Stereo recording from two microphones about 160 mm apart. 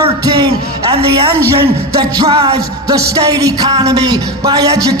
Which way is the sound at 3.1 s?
20° right (ahead or behind).